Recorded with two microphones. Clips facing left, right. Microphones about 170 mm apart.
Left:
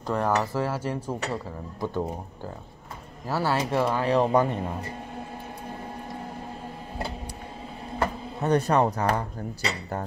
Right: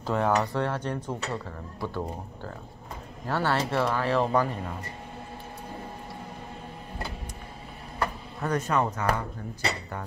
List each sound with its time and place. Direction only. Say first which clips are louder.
0.0 s speech: even; centre (ahead or behind); by 4.7 s 20° left (ahead or behind)
8.0 s speech: left 3 dB; 30° left (ahead or behind)